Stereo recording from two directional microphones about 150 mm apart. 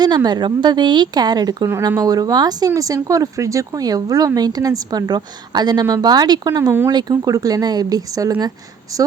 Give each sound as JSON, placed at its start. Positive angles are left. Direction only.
{"t": 0.0, "sound": "speech", "side_deg": -25}